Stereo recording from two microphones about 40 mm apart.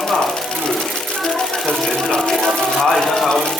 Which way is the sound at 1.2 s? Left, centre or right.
Centre.